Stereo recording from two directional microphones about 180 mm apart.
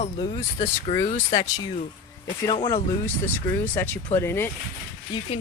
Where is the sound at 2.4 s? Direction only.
25° left (ahead or behind).